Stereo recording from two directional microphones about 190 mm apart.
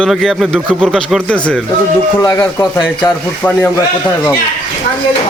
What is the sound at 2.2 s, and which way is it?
A man's voice, 15° left (ahead or behind).